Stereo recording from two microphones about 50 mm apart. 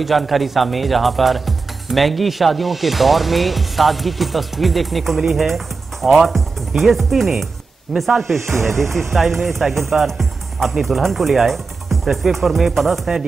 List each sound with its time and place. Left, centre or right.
0.0 s speech: centre
8.5 s speech: right
8.9 s speech: centre